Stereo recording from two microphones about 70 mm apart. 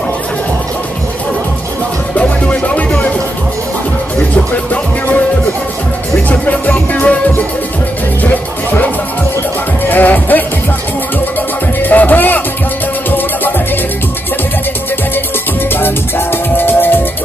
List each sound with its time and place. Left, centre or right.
2.1 s music: left
6.2 s music: left
11.8 s music: left
15.7 s music: left